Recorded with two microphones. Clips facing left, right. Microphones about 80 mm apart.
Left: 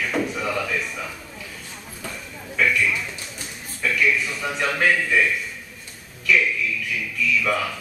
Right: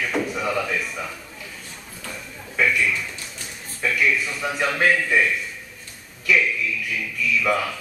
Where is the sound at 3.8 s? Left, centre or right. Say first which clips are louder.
Even; centre.